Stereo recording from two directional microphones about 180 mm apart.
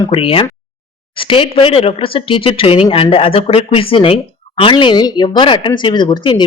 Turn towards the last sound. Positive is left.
turn(degrees=25)  # may be behind; listen again after turning